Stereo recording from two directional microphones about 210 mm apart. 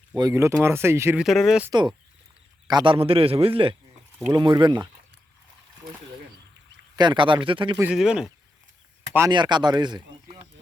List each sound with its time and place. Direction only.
0.2 s speech: 15° right (ahead or behind)
2.6 s a man's voice: 20° right (ahead or behind)
6.9 s a man's voice: 20° right (ahead or behind)
7.8 s speech: 5° right (ahead or behind)
9.1 s speech: 20° right (ahead or behind)